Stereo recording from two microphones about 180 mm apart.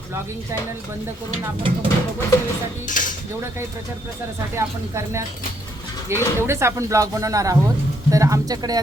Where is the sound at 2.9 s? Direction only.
45° left (ahead or behind).